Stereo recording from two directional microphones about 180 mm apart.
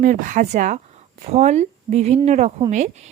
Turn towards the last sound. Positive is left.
turn(degrees=-40)  # may be behind; listen again after turning